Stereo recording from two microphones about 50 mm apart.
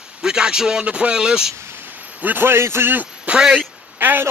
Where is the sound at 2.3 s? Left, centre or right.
Right.